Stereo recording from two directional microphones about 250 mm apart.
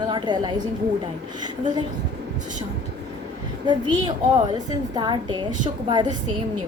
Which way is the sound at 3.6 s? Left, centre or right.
Centre.